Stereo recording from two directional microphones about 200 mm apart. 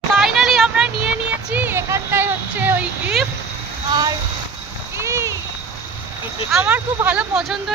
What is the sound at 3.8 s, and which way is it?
Speech, 20° right (ahead or behind).